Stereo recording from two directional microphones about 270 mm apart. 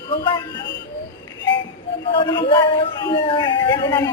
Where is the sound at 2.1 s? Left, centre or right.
Centre.